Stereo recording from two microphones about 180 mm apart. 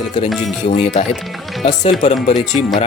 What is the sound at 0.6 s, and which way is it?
Speech, 40° left (ahead or behind).